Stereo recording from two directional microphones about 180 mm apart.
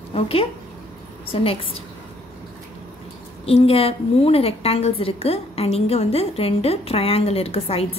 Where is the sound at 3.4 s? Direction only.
35° left (ahead or behind).